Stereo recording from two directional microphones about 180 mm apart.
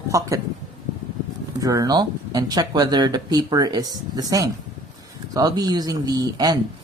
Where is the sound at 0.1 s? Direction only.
15° right (ahead or behind).